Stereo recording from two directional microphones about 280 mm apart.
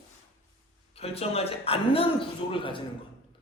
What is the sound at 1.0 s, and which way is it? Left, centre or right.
A man's voice, left.